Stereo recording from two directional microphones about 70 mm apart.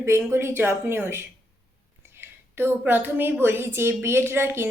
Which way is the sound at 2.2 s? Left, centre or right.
Right.